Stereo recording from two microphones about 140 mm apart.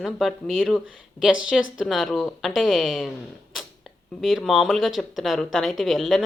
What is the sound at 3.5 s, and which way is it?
Creak, centre (ahead or behind).